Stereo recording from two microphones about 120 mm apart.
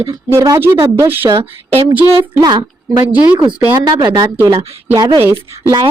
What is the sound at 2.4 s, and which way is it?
Speech, 35° right (ahead or behind).